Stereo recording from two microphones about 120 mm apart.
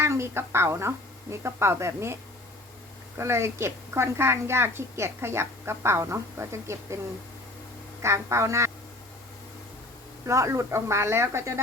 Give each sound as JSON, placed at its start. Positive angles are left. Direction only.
{"t": 0.0, "sound": "a woman's voice", "side_deg": -20}
{"t": 3.2, "sound": "a woman's voice", "side_deg": -20}
{"t": 8.0, "sound": "a woman's voice", "side_deg": -25}
{"t": 10.2, "sound": "a woman's voice", "side_deg": -25}